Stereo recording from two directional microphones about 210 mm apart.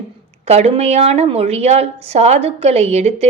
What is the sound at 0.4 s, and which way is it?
A woman's voice, 30° right (ahead or behind).